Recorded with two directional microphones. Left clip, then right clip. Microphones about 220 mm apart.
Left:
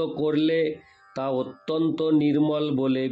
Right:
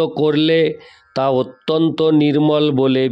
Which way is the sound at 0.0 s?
45° right (ahead or behind).